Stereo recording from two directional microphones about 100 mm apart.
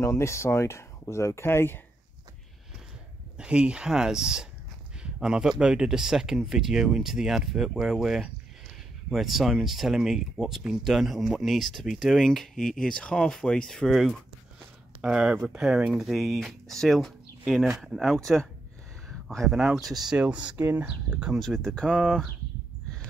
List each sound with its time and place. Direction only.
0.0 s speech: 30° left (ahead or behind)
3.3 s speech: 10° right (ahead or behind)
19.0 s a sound: centre (ahead or behind)
19.6 s speech: centre (ahead or behind)
21.4 s speech: 5° left (ahead or behind)